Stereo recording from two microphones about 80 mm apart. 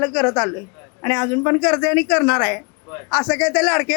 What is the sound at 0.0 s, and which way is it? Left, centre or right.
A man's voice, centre.